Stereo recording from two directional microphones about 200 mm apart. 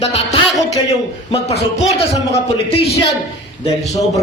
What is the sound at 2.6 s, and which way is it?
Speech, 30° left (ahead or behind).